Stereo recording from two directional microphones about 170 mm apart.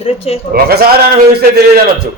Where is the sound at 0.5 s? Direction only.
65° right (ahead or behind).